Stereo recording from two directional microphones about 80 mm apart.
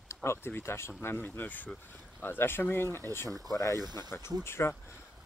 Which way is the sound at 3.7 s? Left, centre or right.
Right.